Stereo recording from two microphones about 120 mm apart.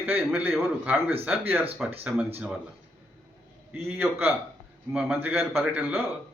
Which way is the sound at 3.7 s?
15° right (ahead or behind).